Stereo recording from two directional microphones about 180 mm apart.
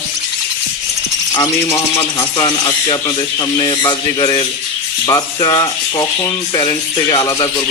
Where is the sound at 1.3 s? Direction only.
20° left (ahead or behind).